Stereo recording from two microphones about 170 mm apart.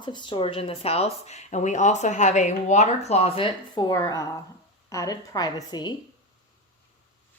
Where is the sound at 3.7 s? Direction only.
20° left (ahead or behind).